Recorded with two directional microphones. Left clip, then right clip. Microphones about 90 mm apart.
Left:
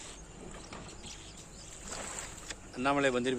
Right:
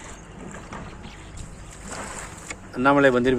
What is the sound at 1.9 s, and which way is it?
Boat, 70° right (ahead or behind).